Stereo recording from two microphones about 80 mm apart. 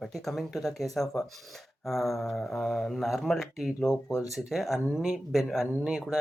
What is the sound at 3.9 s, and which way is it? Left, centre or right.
Speech, left.